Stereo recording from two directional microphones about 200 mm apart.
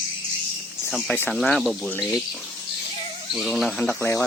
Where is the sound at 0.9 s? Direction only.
Centre (ahead or behind).